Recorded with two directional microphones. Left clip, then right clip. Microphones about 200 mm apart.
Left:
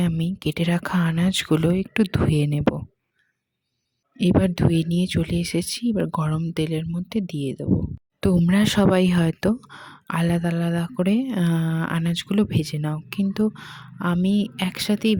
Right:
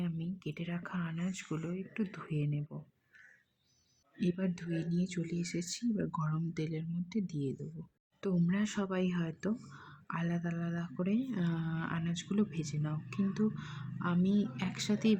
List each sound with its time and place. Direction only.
0.0 s speech: 55° left (ahead or behind)
4.2 s speech: 45° left (ahead or behind)